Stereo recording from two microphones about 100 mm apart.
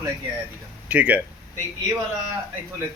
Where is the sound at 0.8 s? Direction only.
15° right (ahead or behind).